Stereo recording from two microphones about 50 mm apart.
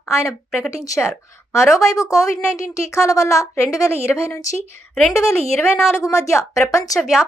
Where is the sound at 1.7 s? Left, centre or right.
Left.